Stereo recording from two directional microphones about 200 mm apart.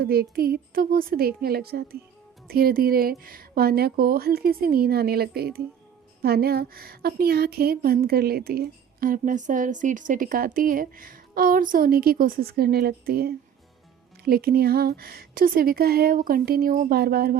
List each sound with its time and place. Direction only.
0.0 s a woman's voice: 50° right (ahead or behind)